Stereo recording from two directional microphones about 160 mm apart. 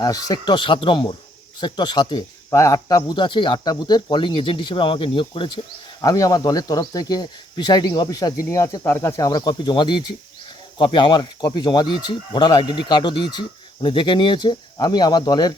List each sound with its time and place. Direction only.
0.0 s speech: 25° left (ahead or behind)
6.0 s speech: 25° left (ahead or behind)